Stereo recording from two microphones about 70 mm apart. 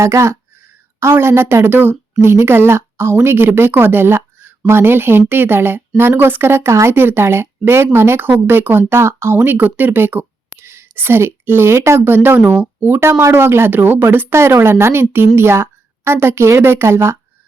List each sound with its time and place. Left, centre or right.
0.0 s a woman's voice: right